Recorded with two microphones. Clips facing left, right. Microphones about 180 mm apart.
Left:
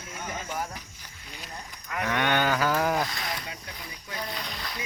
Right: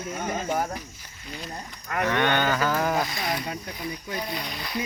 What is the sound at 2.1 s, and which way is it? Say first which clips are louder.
Speech: even; 5° left (ahead or behind).